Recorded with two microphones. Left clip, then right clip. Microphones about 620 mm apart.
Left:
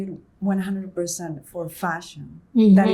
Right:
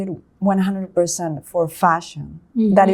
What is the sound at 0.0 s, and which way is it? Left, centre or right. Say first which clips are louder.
Speech: right 8 dB; right.